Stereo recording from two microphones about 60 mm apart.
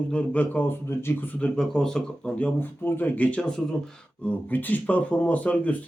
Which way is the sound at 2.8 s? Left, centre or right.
Left.